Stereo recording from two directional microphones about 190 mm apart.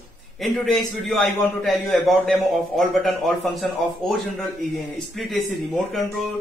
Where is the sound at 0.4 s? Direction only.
Centre (ahead or behind).